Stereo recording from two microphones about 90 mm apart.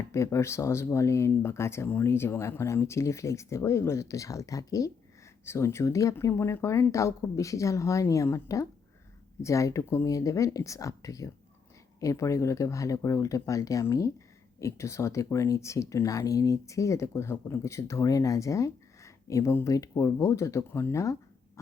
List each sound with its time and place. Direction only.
0.1 s speech: 35° left (ahead or behind)